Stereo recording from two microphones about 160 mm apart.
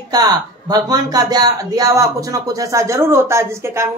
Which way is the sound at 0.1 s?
25° right (ahead or behind).